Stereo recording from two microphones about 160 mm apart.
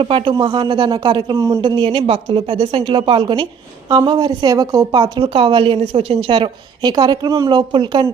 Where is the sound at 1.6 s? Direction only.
30° right (ahead or behind).